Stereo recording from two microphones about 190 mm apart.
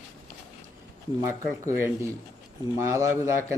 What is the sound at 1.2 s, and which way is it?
A man's voice, 15° right (ahead or behind).